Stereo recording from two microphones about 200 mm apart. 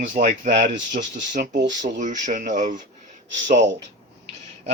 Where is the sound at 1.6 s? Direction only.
60° right (ahead or behind).